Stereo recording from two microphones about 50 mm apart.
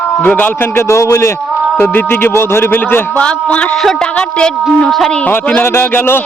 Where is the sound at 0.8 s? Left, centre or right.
Left.